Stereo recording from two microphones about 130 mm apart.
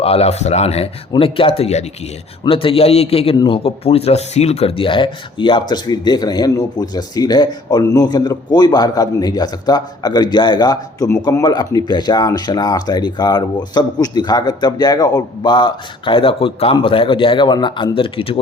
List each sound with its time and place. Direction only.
0.0 s a man's voice: 50° left (ahead or behind)